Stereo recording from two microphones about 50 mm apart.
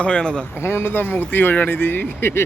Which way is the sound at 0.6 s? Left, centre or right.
Left.